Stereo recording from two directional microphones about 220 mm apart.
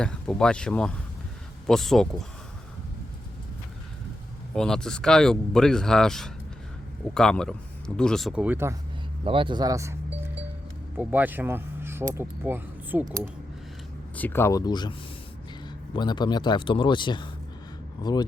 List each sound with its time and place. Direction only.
0.0 s speech: 5° left (ahead or behind)
4.5 s speech: 5° left (ahead or behind)
9.2 s speech: 25° right (ahead or behind)
14.2 s speech: 10° left (ahead or behind)